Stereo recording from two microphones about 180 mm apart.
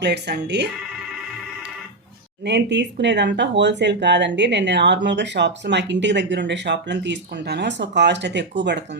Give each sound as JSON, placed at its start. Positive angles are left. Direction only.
{"t": 0.0, "sound": "speech", "side_deg": -70}
{"t": 2.4, "sound": "speech", "side_deg": -70}